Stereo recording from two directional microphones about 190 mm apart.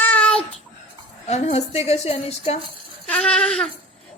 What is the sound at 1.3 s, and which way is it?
Speech, 35° left (ahead or behind).